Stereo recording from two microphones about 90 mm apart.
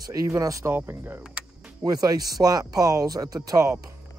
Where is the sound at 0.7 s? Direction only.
20° right (ahead or behind).